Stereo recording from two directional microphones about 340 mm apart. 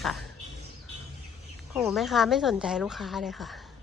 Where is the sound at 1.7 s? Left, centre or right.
Centre.